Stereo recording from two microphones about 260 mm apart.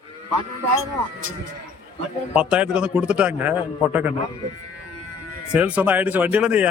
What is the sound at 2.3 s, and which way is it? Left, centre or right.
A man's voice, centre.